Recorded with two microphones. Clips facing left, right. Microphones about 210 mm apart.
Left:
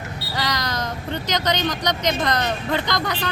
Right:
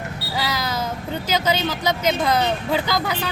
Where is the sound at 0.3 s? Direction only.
5° right (ahead or behind).